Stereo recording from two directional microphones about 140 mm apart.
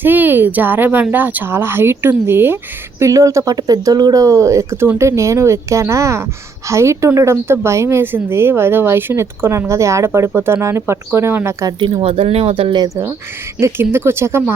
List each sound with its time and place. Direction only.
0.0 s a woman's voice: 15° right (ahead or behind)
11.8 s speech: 40° right (ahead or behind)
13.6 s a woman's voice: 20° right (ahead or behind)